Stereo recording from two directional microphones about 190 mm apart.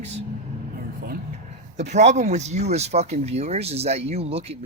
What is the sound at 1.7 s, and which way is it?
Speech, 40° right (ahead or behind).